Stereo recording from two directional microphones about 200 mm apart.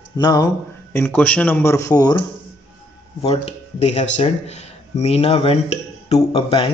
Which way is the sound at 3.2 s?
30° left (ahead or behind).